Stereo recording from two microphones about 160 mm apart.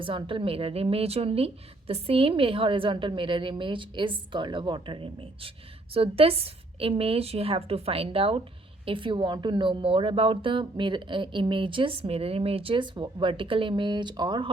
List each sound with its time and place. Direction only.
0.0 s a woman's voice: 30° right (ahead or behind)